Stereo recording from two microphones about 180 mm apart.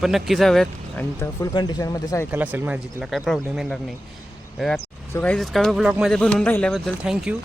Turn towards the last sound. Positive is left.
turn(degrees=-5)  # may be behind; listen again after turning